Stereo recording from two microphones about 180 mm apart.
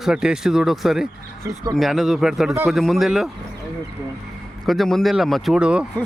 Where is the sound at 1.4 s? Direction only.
15° right (ahead or behind).